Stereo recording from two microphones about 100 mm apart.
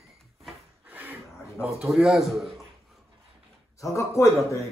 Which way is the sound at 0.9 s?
15° right (ahead or behind).